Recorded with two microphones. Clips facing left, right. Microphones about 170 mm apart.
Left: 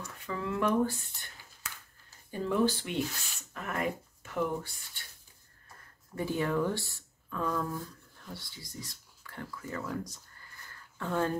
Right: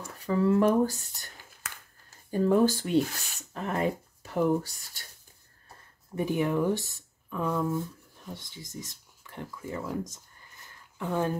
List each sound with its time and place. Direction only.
0.0 s speech: 35° right (ahead or behind)
2.3 s speech: 45° right (ahead or behind)
6.1 s speech: 15° right (ahead or behind)